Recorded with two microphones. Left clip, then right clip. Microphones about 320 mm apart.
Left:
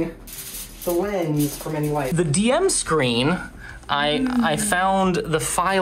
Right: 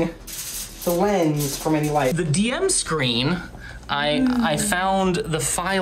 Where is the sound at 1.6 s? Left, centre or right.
Right.